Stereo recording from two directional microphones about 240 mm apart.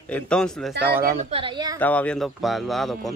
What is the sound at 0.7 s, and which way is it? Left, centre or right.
Speech, right.